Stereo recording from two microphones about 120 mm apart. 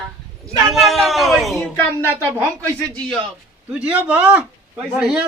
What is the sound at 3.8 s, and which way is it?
A man's voice, 10° right (ahead or behind).